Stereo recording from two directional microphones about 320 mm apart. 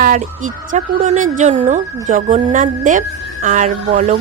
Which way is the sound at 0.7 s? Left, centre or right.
Right.